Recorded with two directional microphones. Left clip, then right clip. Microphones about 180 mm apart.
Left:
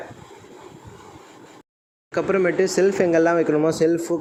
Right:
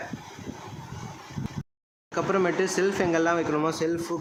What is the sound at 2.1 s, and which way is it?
Speech, 10° left (ahead or behind).